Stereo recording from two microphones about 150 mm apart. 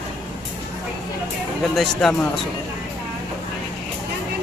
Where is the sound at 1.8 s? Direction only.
5° left (ahead or behind).